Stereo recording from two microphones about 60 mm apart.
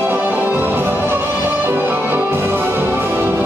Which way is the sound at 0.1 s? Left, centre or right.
Right.